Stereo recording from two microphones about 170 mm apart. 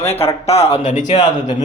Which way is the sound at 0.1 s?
40° left (ahead or behind).